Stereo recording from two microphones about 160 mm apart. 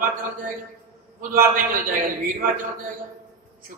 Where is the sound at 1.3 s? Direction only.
60° right (ahead or behind).